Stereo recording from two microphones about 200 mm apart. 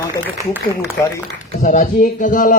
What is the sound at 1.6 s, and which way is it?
Speech, 40° left (ahead or behind).